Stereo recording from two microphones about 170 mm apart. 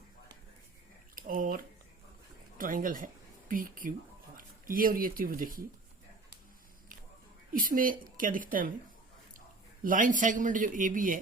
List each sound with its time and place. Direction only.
1.3 s speech: 55° right (ahead or behind)
7.5 s speech: 55° right (ahead or behind)
9.8 s speech: 50° right (ahead or behind)